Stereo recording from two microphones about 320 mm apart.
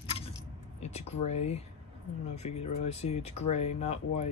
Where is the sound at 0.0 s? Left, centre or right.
Centre.